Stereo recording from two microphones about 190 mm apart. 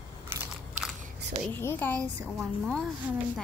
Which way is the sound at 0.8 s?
40° right (ahead or behind).